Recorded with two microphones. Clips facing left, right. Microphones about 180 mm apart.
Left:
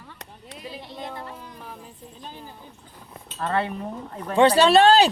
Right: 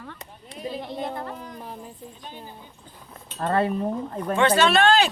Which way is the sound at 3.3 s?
40° right (ahead or behind).